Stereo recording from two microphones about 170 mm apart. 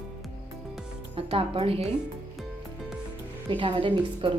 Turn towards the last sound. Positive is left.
turn(degrees=-30)  # may be behind; listen again after turning